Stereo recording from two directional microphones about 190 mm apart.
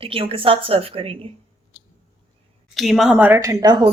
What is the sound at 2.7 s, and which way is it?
Speech, centre (ahead or behind).